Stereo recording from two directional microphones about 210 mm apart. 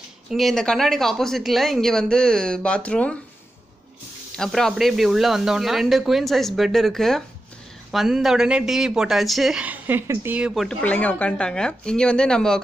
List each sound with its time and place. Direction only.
0.3 s speech: centre (ahead or behind)
4.4 s speech: centre (ahead or behind)